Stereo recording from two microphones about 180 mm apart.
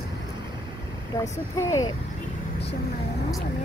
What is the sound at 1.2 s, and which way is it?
Speech, 20° left (ahead or behind).